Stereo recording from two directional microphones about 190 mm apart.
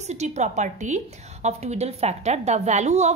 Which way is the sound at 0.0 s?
35° right (ahead or behind).